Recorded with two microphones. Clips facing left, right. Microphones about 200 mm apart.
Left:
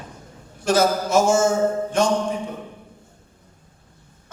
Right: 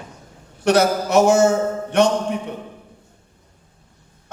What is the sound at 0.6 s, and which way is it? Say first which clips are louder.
A man's voice: right 2 dB; 65° right (ahead or behind).